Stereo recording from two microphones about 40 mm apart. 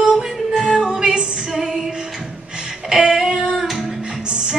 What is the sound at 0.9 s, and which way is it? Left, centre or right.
Music, right.